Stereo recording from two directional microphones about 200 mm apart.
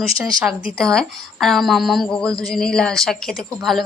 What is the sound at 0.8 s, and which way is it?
Speech, 5° left (ahead or behind).